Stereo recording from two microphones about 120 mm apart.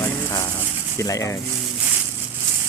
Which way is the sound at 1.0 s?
25° left (ahead or behind).